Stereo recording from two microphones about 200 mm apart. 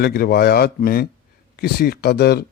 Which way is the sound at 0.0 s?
50° left (ahead or behind).